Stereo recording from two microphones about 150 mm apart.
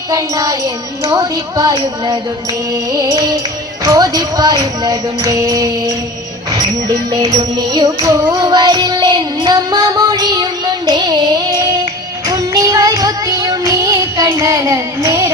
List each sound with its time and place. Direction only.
0.1 s music: 20° right (ahead or behind)